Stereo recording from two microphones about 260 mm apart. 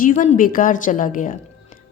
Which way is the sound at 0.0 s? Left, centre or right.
Left.